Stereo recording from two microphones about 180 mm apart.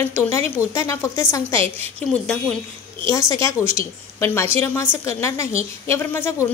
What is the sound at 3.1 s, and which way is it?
A woman's voice, 15° left (ahead or behind).